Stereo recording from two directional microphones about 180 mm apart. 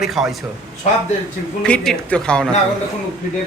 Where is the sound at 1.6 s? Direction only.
5° left (ahead or behind).